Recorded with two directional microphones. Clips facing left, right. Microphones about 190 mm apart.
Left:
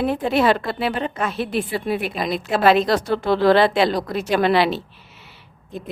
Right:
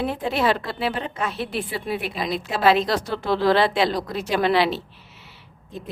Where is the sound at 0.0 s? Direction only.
50° left (ahead or behind).